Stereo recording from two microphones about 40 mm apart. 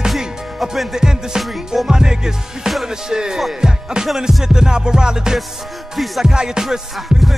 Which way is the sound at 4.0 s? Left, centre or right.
Right.